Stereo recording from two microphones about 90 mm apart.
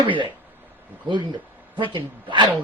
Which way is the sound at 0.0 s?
70° right (ahead or behind).